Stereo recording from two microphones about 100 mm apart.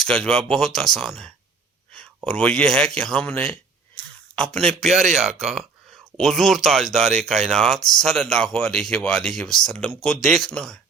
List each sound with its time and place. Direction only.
0.0 s a man's voice: 5° left (ahead or behind)